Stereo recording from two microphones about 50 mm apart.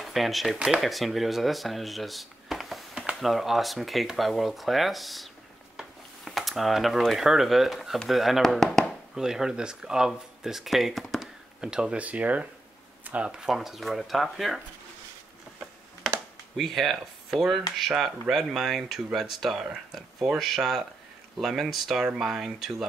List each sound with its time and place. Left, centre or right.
0.0 s speech: centre
5.8 s a sound: centre
7.1 s speech: centre
8.4 s speech: centre
9.1 s speech: centre
11.6 s speech: centre
12.0 s speech: right
13.0 s a sound: right
13.3 s speech: centre
16.5 s speech: centre